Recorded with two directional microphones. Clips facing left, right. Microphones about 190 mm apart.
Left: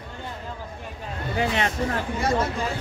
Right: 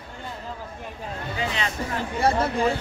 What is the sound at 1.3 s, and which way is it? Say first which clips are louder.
Speech: left 5 dB; 60° left (ahead or behind).